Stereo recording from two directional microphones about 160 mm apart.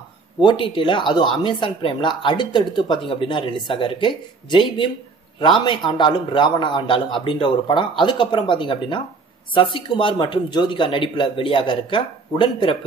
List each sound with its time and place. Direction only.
0.4 s speech: 30° left (ahead or behind)